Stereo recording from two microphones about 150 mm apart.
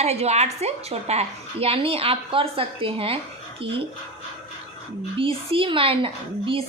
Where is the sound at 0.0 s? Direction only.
45° right (ahead or behind).